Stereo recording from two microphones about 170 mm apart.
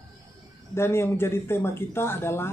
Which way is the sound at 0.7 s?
15° left (ahead or behind).